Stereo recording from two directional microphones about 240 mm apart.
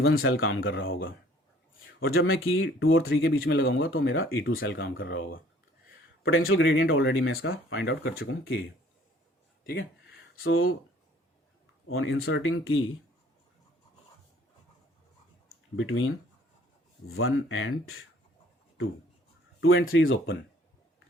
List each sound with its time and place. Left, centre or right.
0.0 s speech: left
6.2 s speech: left
10.3 s speech: left
11.9 s speech: left
15.7 s speech: left
19.6 s speech: left